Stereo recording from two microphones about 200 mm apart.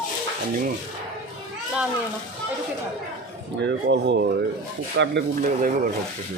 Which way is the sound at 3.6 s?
60° right (ahead or behind).